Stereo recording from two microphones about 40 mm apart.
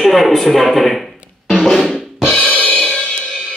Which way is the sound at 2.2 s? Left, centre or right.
Left.